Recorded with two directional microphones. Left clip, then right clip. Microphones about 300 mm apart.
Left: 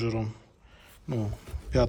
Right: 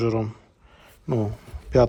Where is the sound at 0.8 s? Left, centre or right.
Centre.